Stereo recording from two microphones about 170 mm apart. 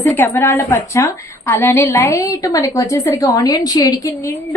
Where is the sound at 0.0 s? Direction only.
15° left (ahead or behind).